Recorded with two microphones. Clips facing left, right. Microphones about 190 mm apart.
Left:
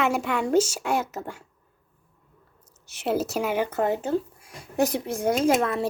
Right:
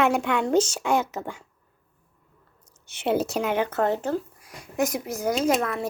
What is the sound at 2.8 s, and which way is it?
Speech, centre (ahead or behind).